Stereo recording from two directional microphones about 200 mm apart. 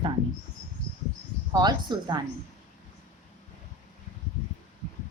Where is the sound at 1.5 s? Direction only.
20° right (ahead or behind).